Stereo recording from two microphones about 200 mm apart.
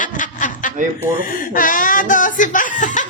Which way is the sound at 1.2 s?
40° left (ahead or behind).